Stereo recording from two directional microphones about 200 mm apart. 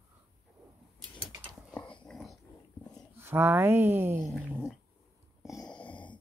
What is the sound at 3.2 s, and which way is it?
Speech, 10° right (ahead or behind).